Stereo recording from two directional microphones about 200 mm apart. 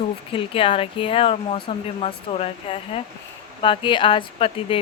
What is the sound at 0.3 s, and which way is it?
Speech, 25° left (ahead or behind).